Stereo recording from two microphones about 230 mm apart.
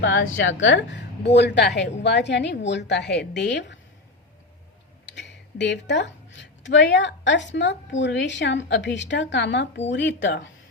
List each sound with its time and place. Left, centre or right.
0.0 s a woman's voice: left
5.0 s a woman's voice: left